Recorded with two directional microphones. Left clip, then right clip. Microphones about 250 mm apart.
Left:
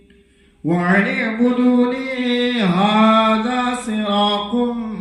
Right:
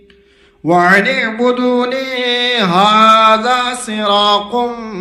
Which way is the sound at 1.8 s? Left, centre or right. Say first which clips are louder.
Right 4 dB; right.